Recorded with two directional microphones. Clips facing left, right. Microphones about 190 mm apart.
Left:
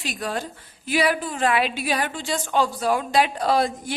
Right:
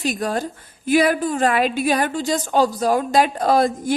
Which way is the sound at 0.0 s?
45° right (ahead or behind).